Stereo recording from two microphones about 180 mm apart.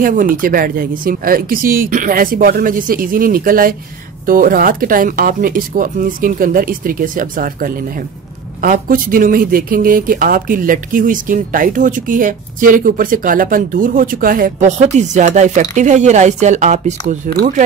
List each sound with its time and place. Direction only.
0.0 s speech: 50° right (ahead or behind)